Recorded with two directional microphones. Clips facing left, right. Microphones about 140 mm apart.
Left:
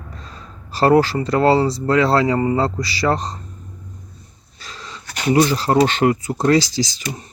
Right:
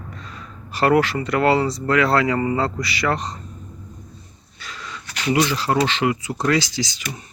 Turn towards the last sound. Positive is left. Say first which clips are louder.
# left 5 dB
turn(degrees=35)  # may be behind; listen again after turning